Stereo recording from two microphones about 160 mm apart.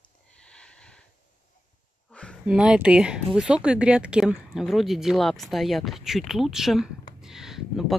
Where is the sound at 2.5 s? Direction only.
5° right (ahead or behind).